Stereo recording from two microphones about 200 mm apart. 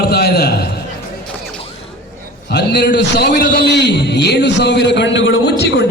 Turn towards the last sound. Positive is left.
turn(degrees=65)  # may be behind; listen again after turning